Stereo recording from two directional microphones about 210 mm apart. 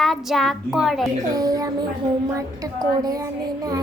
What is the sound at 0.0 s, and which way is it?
Speech, centre (ahead or behind).